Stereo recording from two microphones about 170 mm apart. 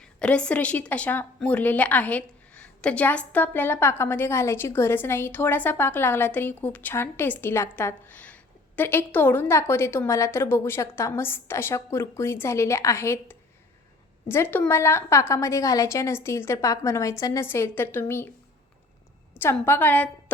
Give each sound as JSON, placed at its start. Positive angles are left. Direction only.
{"t": 0.2, "sound": "a woman's voice", "side_deg": 5}
{"t": 19.3, "sound": "a woman's voice", "side_deg": 10}